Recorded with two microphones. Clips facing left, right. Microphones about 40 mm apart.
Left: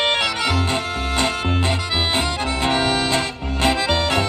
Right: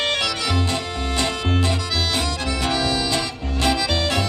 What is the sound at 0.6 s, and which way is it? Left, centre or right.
Music, left.